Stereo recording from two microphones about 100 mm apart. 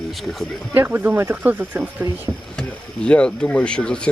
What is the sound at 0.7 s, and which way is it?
Speech, 20° right (ahead or behind).